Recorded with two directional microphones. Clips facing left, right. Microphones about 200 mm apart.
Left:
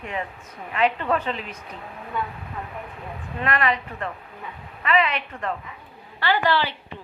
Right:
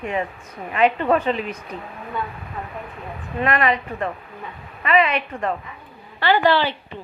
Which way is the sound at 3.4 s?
20° right (ahead or behind).